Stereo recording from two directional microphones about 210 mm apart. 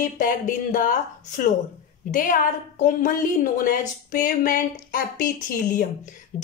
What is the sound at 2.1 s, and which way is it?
A woman's voice, 40° left (ahead or behind).